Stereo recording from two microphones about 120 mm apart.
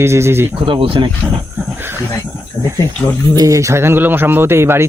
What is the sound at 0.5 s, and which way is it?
Speech, 45° right (ahead or behind).